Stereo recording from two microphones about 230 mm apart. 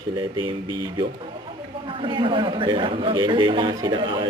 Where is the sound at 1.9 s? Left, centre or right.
Right.